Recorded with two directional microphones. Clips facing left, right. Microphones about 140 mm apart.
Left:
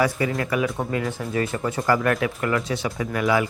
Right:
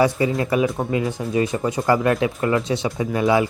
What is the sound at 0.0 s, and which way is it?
Speech, 25° right (ahead or behind).